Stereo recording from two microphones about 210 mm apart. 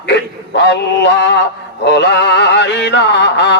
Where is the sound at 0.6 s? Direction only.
55° left (ahead or behind).